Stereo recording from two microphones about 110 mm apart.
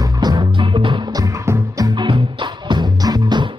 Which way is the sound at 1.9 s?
45° right (ahead or behind).